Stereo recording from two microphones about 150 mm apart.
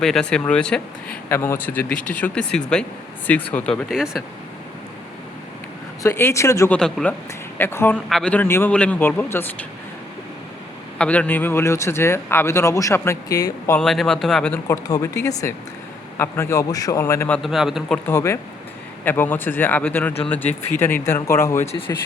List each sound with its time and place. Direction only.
0.0 s speech: 5° left (ahead or behind)
3.8 s speech: 5° right (ahead or behind)
6.0 s a man's voice: 20° left (ahead or behind)
6.7 s speech: 5° left (ahead or behind)
10.9 s speech: 5° left (ahead or behind)
13.7 s speech: centre (ahead or behind)
14.8 s a man's voice: 20° left (ahead or behind)
17.4 s speech: centre (ahead or behind); by 21.7 s 15° left (ahead or behind)